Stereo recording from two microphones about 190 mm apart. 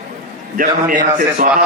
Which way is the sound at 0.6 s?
45° right (ahead or behind).